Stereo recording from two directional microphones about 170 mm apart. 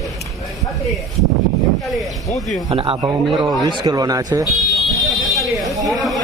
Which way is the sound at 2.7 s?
30° right (ahead or behind).